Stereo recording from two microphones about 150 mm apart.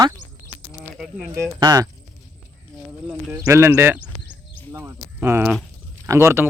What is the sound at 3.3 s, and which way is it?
Speech, 15° right (ahead or behind).